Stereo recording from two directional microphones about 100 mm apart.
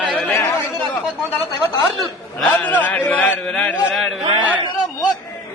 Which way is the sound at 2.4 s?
15° left (ahead or behind).